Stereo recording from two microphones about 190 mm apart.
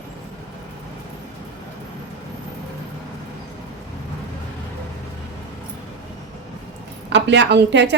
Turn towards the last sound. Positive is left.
turn(degrees=-65)  # may be behind; listen again after turning